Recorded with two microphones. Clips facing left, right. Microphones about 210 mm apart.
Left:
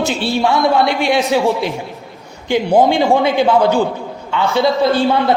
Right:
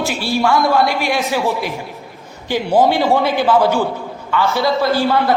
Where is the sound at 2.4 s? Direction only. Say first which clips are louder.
Left 2 dB; 15° left (ahead or behind).